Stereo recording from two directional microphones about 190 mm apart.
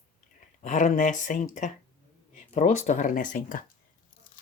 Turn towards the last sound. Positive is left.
turn(degrees=45)  # may be behind; listen again after turning